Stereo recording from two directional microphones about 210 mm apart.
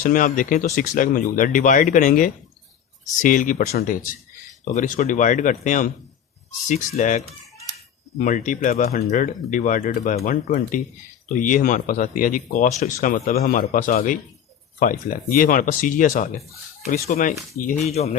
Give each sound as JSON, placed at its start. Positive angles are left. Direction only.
{"t": 0.0, "sound": "speech", "side_deg": 40}
{"t": 8.2, "sound": "speech", "side_deg": 40}